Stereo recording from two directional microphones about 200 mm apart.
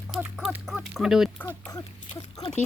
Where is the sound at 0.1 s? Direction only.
5° right (ahead or behind).